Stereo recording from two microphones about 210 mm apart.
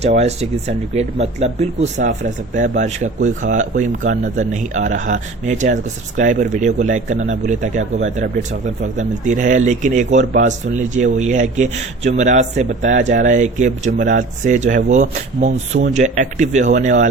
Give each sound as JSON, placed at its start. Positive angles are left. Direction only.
{"t": 0.0, "sound": "speech", "side_deg": -30}